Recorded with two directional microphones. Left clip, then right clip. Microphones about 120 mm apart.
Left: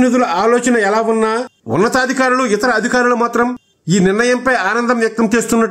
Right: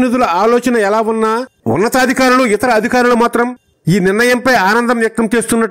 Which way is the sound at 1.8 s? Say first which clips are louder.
Right 1 dB; 80° right.